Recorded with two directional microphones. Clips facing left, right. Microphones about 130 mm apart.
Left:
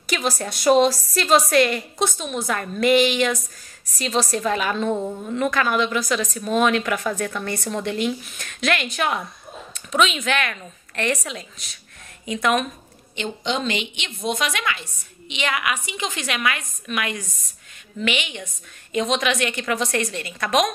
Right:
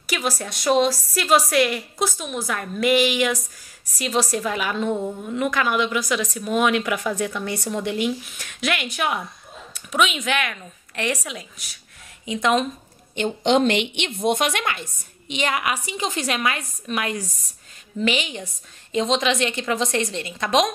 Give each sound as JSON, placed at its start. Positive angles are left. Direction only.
{"t": 0.0, "sound": "a woman's voice", "side_deg": -5}
{"t": 12.3, "sound": "a woman's voice", "side_deg": -20}
{"t": 13.4, "sound": "a woman's voice", "side_deg": -70}